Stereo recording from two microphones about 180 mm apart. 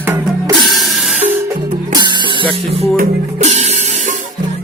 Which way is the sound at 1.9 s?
25° right (ahead or behind).